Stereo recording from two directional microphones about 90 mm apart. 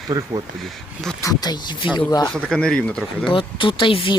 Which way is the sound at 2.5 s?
10° left (ahead or behind).